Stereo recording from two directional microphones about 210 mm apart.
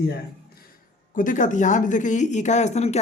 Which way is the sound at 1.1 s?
40° left (ahead or behind).